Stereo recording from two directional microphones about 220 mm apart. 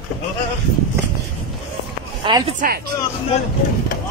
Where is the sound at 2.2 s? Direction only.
20° right (ahead or behind).